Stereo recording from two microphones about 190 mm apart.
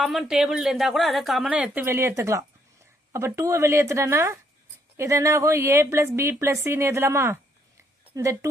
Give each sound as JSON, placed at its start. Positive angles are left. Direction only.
{"t": 0.0, "sound": "a woman's voice", "side_deg": 0}